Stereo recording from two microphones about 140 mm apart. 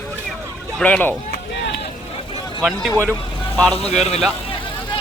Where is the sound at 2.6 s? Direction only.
Centre (ahead or behind).